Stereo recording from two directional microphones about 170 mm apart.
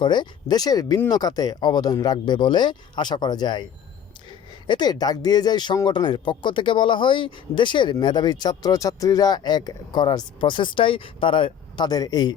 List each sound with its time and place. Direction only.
0.0 s speech: 25° left (ahead or behind)